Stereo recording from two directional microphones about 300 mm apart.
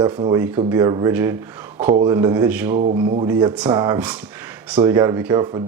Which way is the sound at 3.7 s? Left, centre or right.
Centre.